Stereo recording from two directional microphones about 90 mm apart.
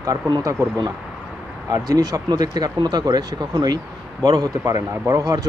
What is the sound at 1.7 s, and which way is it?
Speech, 45° right (ahead or behind).